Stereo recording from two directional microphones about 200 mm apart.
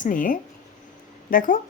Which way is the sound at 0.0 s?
40° left (ahead or behind).